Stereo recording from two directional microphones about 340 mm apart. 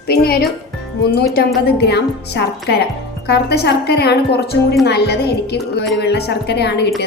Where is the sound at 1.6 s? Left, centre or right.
Left.